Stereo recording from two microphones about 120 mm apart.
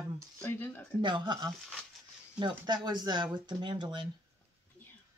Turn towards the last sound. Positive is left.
turn(degrees=-40)  # may be behind; listen again after turning